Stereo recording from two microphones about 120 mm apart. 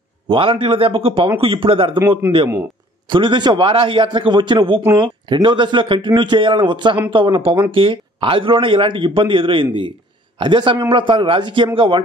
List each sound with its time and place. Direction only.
0.3 s a man's voice: 45° right (ahead or behind)
2.0 s a man's voice: 20° right (ahead or behind)
3.1 s a man's voice: 40° right (ahead or behind)